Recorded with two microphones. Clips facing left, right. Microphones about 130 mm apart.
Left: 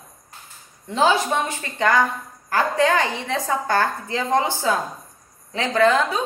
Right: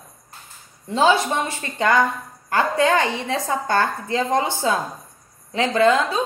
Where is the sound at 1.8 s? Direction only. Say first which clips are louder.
Right 1 dB; 25° right (ahead or behind).